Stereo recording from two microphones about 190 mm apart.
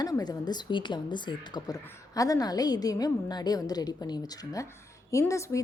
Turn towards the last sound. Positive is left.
turn(degrees=15)  # may be behind; listen again after turning